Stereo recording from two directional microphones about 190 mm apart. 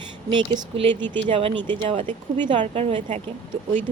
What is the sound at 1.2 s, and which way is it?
A woman's voice, 30° right (ahead or behind).